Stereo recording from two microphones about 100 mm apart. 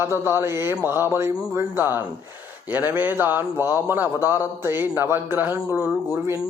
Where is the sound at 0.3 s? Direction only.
25° right (ahead or behind).